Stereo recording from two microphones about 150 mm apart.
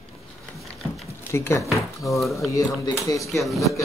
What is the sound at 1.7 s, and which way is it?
Speech, centre (ahead or behind).